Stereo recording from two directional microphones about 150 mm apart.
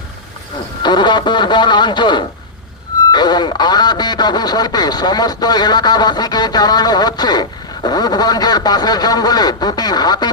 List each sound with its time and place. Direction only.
0.8 s speech: 30° left (ahead or behind)